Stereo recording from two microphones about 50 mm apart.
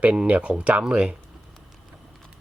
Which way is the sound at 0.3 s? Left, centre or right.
Right.